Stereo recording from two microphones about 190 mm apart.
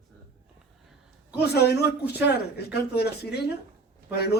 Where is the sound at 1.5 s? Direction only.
55° left (ahead or behind).